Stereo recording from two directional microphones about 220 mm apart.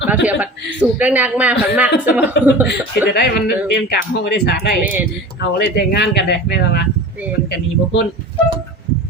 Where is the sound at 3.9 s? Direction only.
50° left (ahead or behind).